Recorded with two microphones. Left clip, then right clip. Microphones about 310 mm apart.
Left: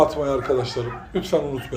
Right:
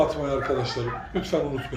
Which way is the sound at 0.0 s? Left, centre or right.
Centre.